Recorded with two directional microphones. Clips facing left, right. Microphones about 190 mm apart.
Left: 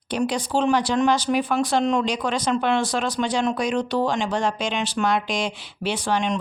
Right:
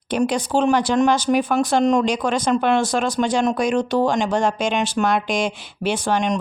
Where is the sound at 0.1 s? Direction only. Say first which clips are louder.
Right 3 dB; 50° right (ahead or behind).